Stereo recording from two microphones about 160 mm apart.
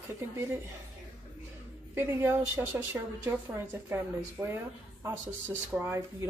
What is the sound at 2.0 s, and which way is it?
A woman's voice, 15° right (ahead or behind).